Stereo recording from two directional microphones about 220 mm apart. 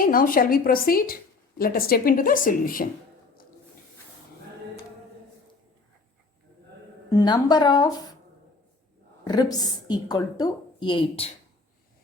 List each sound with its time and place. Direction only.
0.0 s a woman's voice: 40° left (ahead or behind)
7.1 s a woman's voice: 15° left (ahead or behind)
9.2 s a woman's voice: 15° left (ahead or behind)